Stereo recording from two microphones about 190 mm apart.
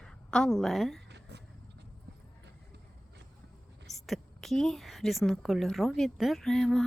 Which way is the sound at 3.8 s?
Centre (ahead or behind).